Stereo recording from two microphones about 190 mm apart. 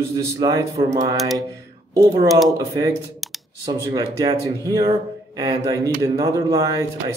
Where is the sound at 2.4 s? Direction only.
20° right (ahead or behind).